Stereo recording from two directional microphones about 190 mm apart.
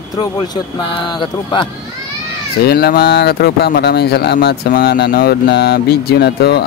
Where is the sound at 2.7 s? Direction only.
55° left (ahead or behind).